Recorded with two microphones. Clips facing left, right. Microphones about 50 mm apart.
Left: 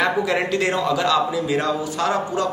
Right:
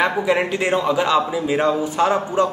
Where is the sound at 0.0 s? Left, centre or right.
Centre.